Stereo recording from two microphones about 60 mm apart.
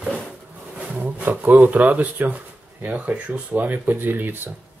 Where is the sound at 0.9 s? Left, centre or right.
Right.